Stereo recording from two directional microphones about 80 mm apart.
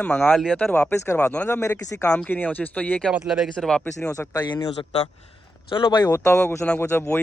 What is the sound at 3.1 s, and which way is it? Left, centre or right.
Speech, centre.